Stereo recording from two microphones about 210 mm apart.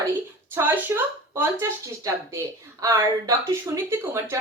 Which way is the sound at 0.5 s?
10° right (ahead or behind).